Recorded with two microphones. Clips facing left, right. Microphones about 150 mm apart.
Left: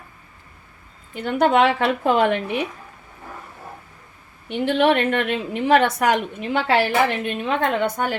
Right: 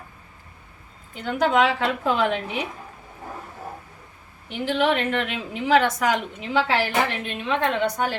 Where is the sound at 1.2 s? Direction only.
65° left (ahead or behind).